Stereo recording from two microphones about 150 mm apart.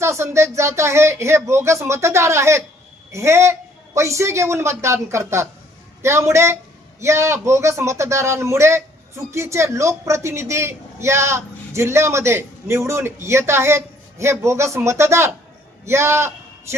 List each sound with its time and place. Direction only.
0.0 s a man's voice: 20° right (ahead or behind)